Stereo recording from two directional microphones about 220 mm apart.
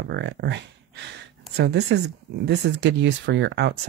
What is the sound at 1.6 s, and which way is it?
Speech, 50° right (ahead or behind).